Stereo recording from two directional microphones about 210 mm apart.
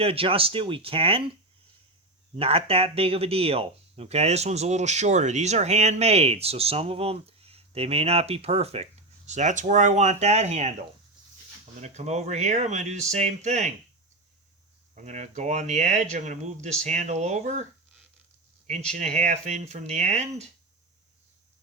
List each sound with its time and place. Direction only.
0.0 s speech: 25° right (ahead or behind)
2.3 s speech: 25° right (ahead or behind)
11.8 s speech: 30° right (ahead or behind)
14.9 s speech: 35° right (ahead or behind)
18.7 s speech: 35° right (ahead or behind)